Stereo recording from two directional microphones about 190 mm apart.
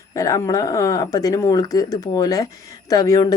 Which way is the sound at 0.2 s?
20° left (ahead or behind).